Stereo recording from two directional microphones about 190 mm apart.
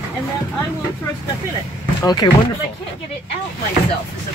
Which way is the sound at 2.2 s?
20° left (ahead or behind).